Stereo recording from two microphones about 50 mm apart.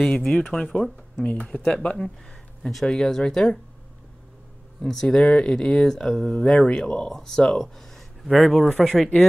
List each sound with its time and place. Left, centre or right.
0.3 s speech: left
1.3 s speech: left
2.7 s speech: centre
4.8 s speech: centre
6.3 s speech: centre